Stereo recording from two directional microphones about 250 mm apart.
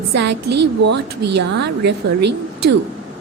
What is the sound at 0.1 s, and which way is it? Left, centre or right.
A woman's voice, right.